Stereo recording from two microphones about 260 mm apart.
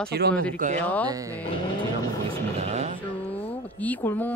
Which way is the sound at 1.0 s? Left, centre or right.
Centre.